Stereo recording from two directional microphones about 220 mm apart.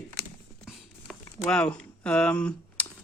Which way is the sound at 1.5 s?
5° left (ahead or behind).